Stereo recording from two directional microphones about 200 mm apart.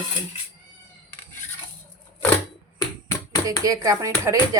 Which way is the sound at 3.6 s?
15° right (ahead or behind).